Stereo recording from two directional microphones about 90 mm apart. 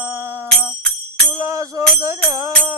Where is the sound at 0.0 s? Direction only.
25° right (ahead or behind).